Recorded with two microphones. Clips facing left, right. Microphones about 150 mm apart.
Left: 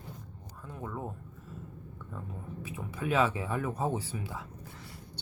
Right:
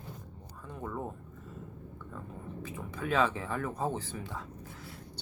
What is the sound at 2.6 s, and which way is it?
Speech, 10° left (ahead or behind).